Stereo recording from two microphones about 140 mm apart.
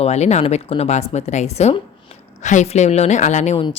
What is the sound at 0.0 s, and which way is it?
A woman's voice, 50° left (ahead or behind).